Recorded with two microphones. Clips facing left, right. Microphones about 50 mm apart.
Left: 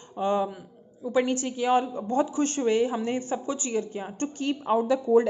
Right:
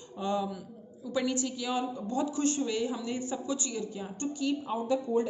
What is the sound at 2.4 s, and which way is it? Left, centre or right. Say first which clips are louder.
A woman's voice: left 6 dB; left.